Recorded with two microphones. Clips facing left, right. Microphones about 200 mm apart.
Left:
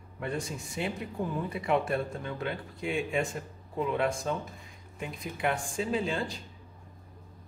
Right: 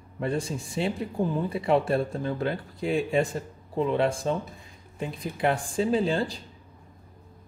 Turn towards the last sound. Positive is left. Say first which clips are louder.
# right 6 dB
turn(degrees=-35)  # may be behind; listen again after turning